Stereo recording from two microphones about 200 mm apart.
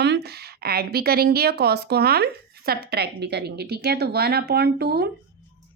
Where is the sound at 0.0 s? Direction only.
55° right (ahead or behind).